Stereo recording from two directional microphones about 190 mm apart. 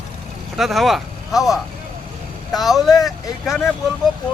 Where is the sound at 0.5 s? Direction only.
Centre (ahead or behind).